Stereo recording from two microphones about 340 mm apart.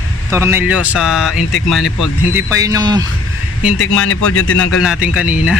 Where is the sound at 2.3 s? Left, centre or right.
Centre.